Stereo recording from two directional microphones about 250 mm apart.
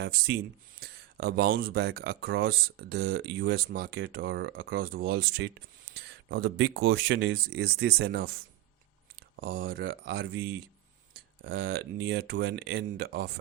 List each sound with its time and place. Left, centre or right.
0.0 s speech: right
9.3 s speech: right